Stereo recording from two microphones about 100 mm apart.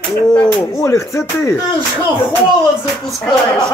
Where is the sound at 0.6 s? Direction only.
30° left (ahead or behind).